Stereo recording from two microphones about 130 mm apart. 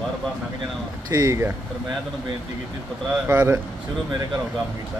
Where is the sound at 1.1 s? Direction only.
25° right (ahead or behind).